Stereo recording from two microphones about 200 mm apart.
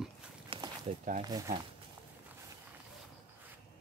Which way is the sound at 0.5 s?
25° right (ahead or behind).